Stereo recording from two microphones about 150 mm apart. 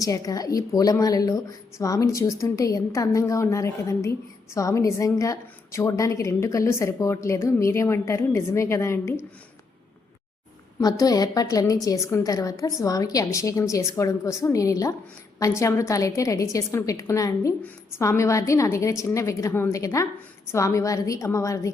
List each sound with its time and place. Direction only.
0.0 s a woman's voice: 25° left (ahead or behind)
10.8 s a woman's voice: 25° left (ahead or behind)